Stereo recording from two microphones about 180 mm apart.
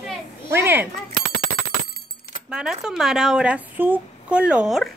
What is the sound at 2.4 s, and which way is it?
Speech, 5° right (ahead or behind).